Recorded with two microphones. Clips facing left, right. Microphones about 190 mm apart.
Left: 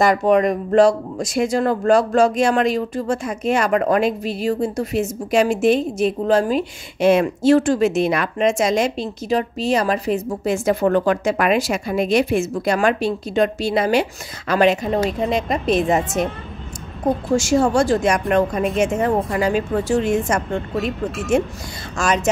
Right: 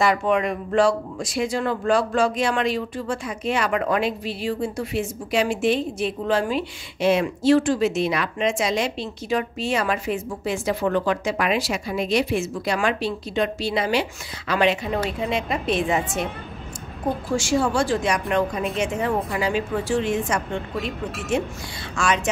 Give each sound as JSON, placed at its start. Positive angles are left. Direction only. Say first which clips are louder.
{"t": 0.0, "sound": "a woman's voice", "louder": "left 5 dB", "side_deg": 40}
{"t": 17.3, "sound": "a woman's voice", "louder": "left 5 dB", "side_deg": 40}